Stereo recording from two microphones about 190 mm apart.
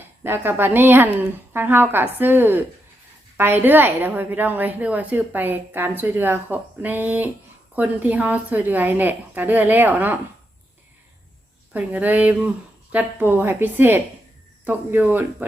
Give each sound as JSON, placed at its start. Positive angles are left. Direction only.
{"t": 0.2, "sound": "a woman's voice", "side_deg": -15}
{"t": 11.7, "sound": "a woman's voice", "side_deg": -10}